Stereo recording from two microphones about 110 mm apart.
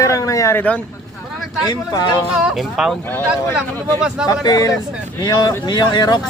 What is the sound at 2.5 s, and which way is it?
Speech, 5° right (ahead or behind).